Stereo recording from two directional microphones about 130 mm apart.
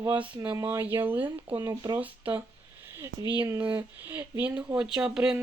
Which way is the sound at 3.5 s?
15° right (ahead or behind).